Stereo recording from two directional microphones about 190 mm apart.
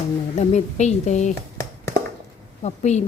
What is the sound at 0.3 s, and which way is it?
Speech, 35° left (ahead or behind).